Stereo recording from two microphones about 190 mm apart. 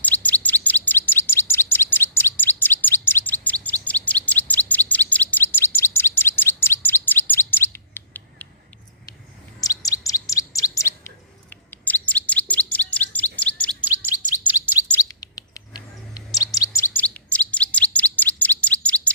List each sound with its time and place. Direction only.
0.0 s chirp: 10° left (ahead or behind)
9.6 s chirp: 20° left (ahead or behind)
13.8 s chirp: 10° right (ahead or behind)
15.4 s bird: 20° left (ahead or behind)
16.4 s chirp: 20° left (ahead or behind)